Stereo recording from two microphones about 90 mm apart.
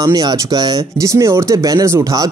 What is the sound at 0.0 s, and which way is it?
Speech, 45° right (ahead or behind).